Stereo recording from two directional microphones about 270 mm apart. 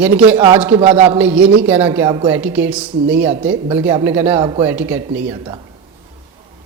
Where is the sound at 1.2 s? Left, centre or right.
Centre.